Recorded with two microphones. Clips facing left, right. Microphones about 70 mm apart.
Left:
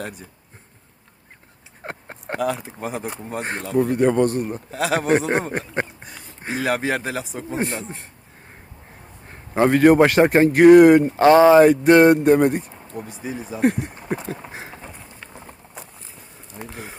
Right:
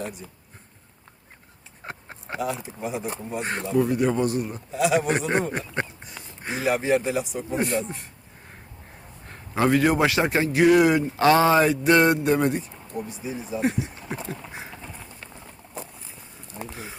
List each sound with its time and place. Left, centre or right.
1.8 s a sound: left
2.6 s a man's voice: left
6.7 s speech: left
7.1 s a man's voice: left
9.2 s a sound: left
9.6 s speech: left
11.2 s speech: left
11.6 s speech: left
14.4 s a sound: left
16.7 s speech: left